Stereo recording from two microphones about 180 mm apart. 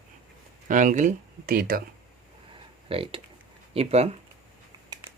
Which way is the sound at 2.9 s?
30° right (ahead or behind).